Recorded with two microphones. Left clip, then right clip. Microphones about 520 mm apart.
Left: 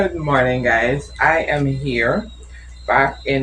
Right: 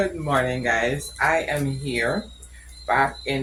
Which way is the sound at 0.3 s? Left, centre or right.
Right.